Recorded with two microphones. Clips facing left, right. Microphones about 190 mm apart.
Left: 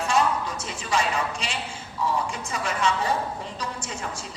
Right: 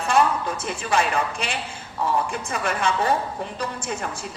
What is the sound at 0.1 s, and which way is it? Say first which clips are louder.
A woman's voice: right 4 dB; 55° right (ahead or behind).